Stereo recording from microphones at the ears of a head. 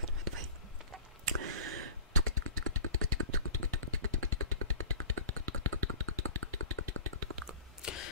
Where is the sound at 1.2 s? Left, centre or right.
Right.